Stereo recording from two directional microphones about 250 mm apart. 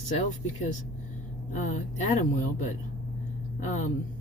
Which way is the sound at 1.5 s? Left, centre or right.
Left.